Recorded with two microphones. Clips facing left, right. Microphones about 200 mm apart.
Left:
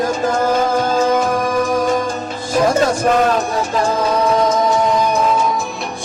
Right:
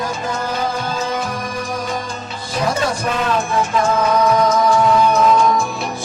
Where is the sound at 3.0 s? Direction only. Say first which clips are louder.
Left 7 dB; 45° left (ahead or behind).